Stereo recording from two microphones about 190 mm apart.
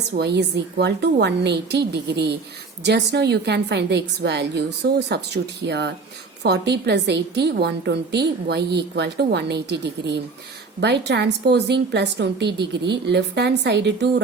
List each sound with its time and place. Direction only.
0.2 s a woman's voice: 60° right (ahead or behind)